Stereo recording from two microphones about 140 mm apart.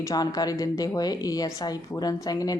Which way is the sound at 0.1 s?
25° left (ahead or behind).